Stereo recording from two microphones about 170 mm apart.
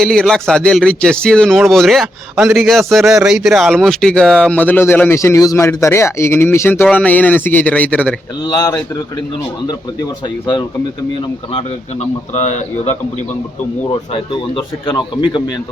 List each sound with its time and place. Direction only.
0.0 s a man's voice: 5° left (ahead or behind)
8.4 s speech: 20° left (ahead or behind)
11.5 s a man's voice: 40° left (ahead or behind)
14.9 s speech: 25° left (ahead or behind)